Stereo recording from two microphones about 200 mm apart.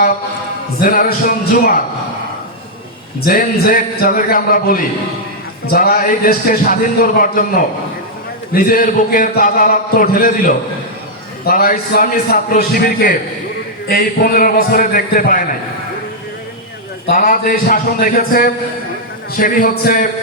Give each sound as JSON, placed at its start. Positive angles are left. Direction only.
{"t": 0.8, "sound": "a man's voice", "side_deg": 45}
{"t": 3.2, "sound": "a man's voice", "side_deg": 45}
{"t": 17.1, "sound": "a man's voice", "side_deg": 45}